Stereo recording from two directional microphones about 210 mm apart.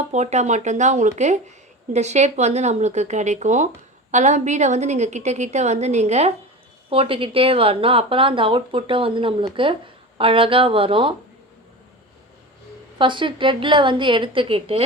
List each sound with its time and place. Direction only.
0.1 s a woman's voice: 35° right (ahead or behind)
13.0 s speech: 25° right (ahead or behind)